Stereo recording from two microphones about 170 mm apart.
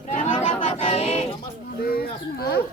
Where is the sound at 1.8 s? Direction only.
60° left (ahead or behind).